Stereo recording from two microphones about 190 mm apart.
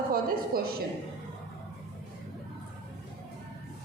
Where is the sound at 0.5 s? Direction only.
50° right (ahead or behind).